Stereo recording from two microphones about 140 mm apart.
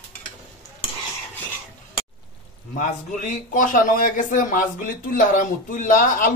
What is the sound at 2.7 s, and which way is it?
A man's voice, 65° left (ahead or behind).